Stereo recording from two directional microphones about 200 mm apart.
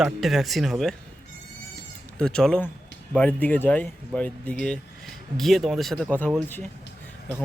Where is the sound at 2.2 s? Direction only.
5° left (ahead or behind).